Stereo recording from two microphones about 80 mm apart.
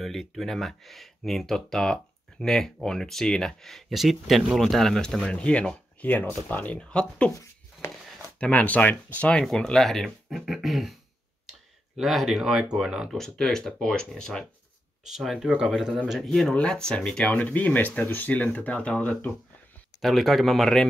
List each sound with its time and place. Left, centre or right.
0.0 s speech: centre
8.4 s speech: centre
9.3 s speech: centre
12.0 s speech: centre
13.1 s speech: centre
15.0 s speech: centre
16.3 s speech: centre
20.0 s speech: centre